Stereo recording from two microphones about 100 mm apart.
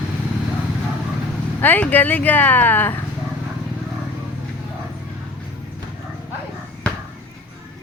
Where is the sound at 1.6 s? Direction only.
20° left (ahead or behind).